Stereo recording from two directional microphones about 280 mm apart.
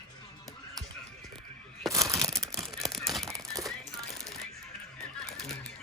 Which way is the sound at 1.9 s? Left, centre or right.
Centre.